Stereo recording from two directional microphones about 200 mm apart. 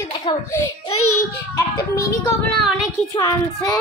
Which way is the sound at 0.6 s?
90° left.